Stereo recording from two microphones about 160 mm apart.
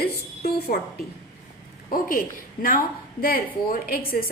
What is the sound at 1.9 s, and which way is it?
A woman's voice, 60° left (ahead or behind).